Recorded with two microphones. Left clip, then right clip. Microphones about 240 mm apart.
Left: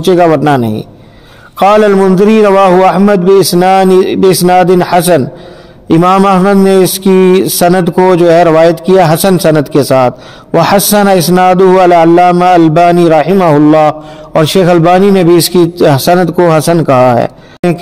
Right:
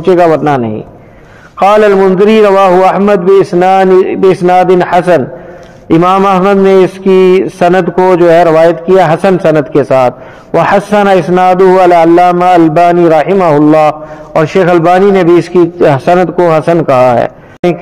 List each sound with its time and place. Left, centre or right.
0.0 s a man's voice: left
7.1 s a man's voice: centre
7.3 s a man's voice: left
15.2 s a man's voice: left
15.8 s a man's voice: left